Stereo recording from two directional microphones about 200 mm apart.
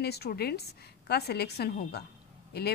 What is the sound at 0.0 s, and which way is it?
A woman's voice, 55° left (ahead or behind).